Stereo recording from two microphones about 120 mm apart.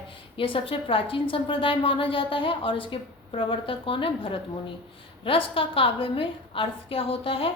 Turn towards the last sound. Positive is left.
turn(degrees=50)  # may be behind; listen again after turning